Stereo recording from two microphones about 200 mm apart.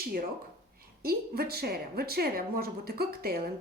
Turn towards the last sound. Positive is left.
turn(degrees=-50)  # may be behind; listen again after turning